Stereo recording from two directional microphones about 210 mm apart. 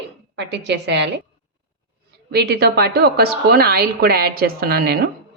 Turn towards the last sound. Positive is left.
turn(degrees=-45)  # may be behind; listen again after turning